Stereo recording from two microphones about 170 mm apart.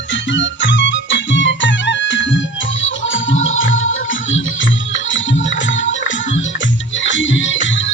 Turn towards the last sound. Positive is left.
turn(degrees=90)